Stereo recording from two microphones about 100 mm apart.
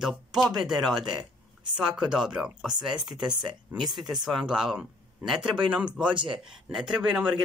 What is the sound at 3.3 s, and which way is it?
Speech, 45° right (ahead or behind).